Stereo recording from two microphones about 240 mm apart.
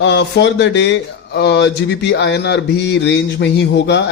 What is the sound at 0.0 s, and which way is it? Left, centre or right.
A man's voice, left.